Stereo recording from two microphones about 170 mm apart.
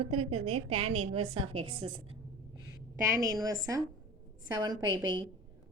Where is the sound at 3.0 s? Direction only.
20° right (ahead or behind).